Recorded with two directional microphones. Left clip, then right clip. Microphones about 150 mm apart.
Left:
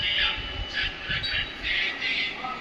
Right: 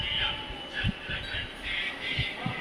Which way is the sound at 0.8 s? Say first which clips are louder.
Left 6 dB; 25° right (ahead or behind).